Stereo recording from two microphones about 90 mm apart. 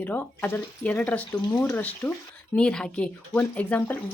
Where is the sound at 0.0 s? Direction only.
20° left (ahead or behind).